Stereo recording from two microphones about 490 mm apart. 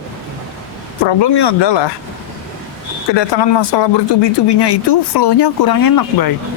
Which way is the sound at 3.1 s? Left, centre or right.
Left.